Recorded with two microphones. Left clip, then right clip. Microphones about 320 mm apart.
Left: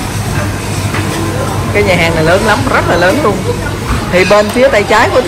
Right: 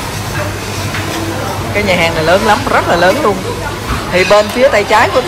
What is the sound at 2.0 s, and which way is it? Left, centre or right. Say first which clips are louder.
Speech: left 1 dB; centre.